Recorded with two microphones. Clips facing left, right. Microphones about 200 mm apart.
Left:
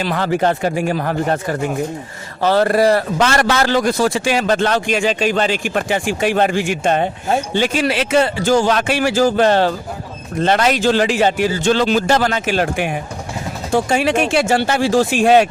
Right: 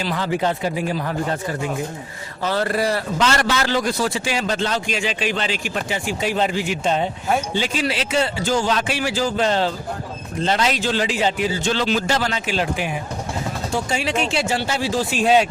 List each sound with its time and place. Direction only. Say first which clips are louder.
0.0 s speech: left 4 dB; 60° left (ahead or behind)
0.3 s a man's voice: left 5 dB; 50° left (ahead or behind)
2.4 s speech: left 8 dB; 75° left (ahead or behind)
2.6 s a man's voice: left 7 dB; 45° left (ahead or behind)